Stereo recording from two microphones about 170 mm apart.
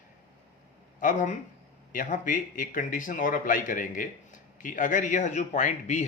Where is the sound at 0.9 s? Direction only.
50° left (ahead or behind).